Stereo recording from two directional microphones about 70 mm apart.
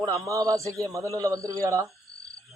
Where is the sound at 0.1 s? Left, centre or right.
Right.